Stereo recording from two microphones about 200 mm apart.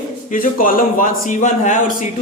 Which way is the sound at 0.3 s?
40° left (ahead or behind).